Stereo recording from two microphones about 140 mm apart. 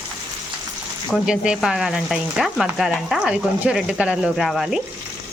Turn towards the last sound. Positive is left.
turn(degrees=0)  # may be behind; listen again after turning